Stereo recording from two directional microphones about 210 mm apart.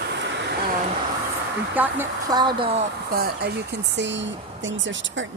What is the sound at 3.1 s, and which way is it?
Speech, 45° right (ahead or behind).